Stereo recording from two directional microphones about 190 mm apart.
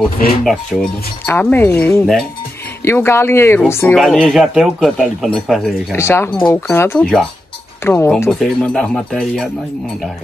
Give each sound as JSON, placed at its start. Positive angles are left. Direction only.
{"t": 0.5, "sound": "speech", "side_deg": 5}
{"t": 3.9, "sound": "speech", "side_deg": 0}
{"t": 5.9, "sound": "speech", "side_deg": 15}
{"t": 7.8, "sound": "speech", "side_deg": 15}